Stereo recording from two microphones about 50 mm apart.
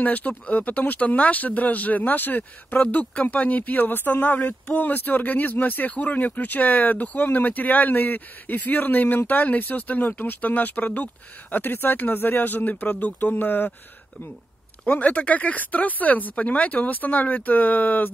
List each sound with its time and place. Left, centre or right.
0.0 s speech: left
2.8 s speech: left
14.9 s speech: left